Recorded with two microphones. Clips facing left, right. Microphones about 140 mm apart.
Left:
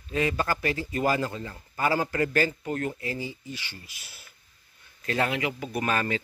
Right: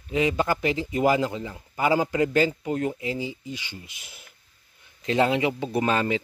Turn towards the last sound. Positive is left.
turn(degrees=-20)  # may be behind; listen again after turning